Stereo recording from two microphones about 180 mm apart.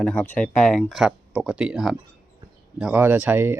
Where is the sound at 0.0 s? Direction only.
5° left (ahead or behind).